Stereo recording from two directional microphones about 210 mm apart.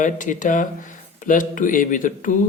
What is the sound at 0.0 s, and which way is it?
Speech, 35° left (ahead or behind).